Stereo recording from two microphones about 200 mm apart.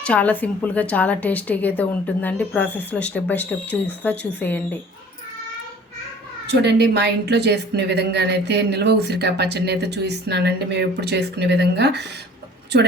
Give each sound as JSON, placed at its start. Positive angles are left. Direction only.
{"t": 0.0, "sound": "a woman's voice", "side_deg": 5}
{"t": 6.5, "sound": "speech", "side_deg": -55}